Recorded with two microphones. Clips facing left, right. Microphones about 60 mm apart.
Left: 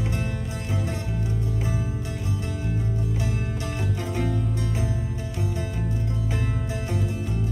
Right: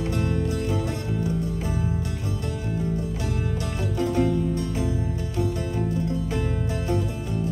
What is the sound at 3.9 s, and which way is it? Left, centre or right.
Music, left.